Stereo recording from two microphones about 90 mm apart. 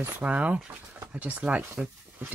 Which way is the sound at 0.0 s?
15° right (ahead or behind).